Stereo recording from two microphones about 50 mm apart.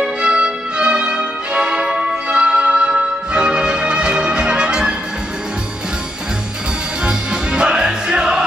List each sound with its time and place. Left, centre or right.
0.0 s music: centre
7.1 s music: centre